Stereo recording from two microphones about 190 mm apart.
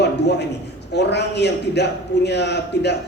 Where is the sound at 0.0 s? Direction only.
65° left (ahead or behind).